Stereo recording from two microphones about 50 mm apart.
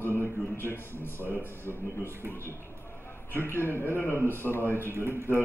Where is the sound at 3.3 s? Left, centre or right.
Left.